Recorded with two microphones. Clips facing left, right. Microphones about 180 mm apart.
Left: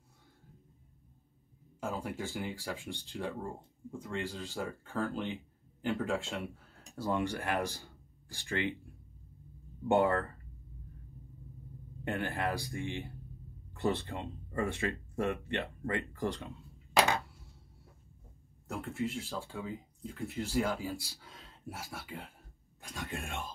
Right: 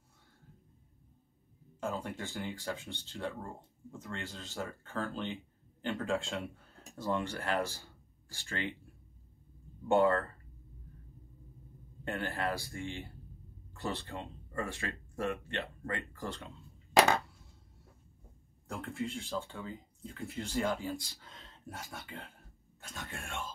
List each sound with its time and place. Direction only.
1.8 s a man's voice: 10° left (ahead or behind)
9.8 s speech: 15° left (ahead or behind)
12.0 s speech: 15° left (ahead or behind)
18.7 s speech: centre (ahead or behind)